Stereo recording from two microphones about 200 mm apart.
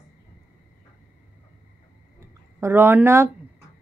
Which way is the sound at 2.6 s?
10° right (ahead or behind).